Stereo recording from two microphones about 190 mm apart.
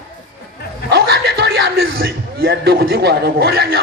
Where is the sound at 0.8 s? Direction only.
60° right (ahead or behind).